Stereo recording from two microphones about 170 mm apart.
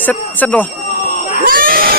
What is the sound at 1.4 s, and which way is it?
Screaming, 55° right (ahead or behind).